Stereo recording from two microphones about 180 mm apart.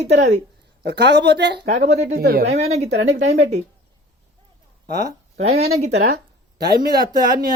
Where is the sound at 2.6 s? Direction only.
35° right (ahead or behind).